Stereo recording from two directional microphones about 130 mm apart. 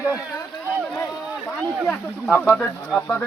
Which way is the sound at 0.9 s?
15° left (ahead or behind).